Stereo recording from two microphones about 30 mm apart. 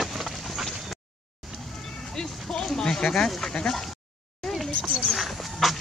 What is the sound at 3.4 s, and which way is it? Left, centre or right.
Speech, centre.